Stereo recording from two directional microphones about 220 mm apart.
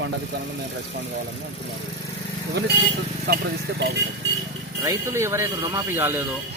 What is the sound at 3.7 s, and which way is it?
Speech, 50° right (ahead or behind).